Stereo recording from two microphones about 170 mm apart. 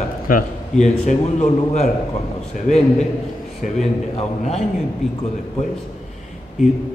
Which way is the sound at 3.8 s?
40° left (ahead or behind).